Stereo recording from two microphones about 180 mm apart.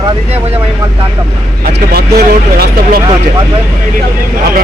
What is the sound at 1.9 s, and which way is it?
Speech, 60° right (ahead or behind).